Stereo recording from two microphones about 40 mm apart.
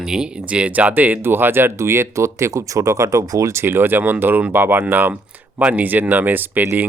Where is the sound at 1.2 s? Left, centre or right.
Right.